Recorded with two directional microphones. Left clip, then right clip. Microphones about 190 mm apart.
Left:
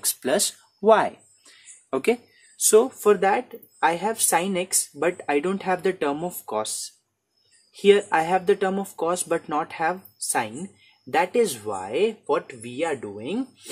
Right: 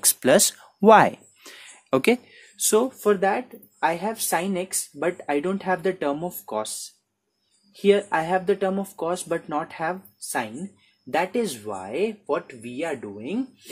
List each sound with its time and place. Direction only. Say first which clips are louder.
0.0 s a sound: right 5 dB; 40° right (ahead or behind)
2.6 s speech: left 3 dB; 20° right (ahead or behind)
3.0 s a woman's voice: left 2 dB; centre (ahead or behind)
7.7 s a woman's voice: left 2 dB; centre (ahead or behind)